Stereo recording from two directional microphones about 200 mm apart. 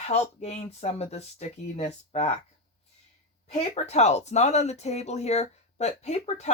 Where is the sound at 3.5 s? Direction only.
35° left (ahead or behind).